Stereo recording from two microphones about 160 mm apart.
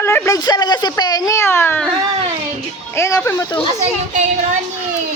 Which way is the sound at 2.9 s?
15° left (ahead or behind).